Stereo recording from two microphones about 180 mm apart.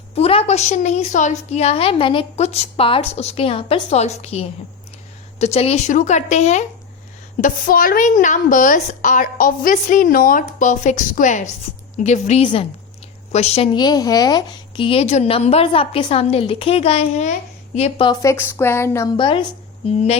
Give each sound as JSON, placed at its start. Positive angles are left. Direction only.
{"t": 0.1, "sound": "a woman's voice", "side_deg": 30}
{"t": 7.4, "sound": "a woman's voice", "side_deg": 50}
{"t": 13.7, "sound": "a woman's voice", "side_deg": 20}
{"t": 19.1, "sound": "a woman's voice", "side_deg": 30}